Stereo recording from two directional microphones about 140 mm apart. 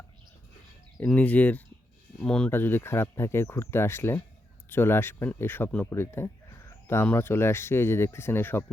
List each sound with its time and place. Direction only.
1.0 s speech: 10° left (ahead or behind)